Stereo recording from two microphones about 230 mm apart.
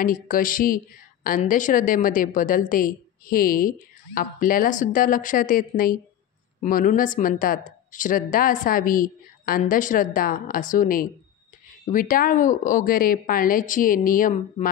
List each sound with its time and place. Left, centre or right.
0.0 s a woman's voice: left